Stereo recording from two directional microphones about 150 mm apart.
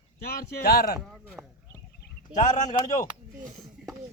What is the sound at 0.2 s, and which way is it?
Speech, 90° left.